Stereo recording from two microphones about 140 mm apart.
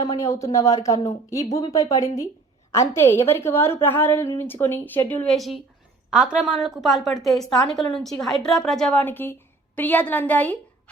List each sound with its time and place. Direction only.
0.0 s a woman's voice: 25° left (ahead or behind)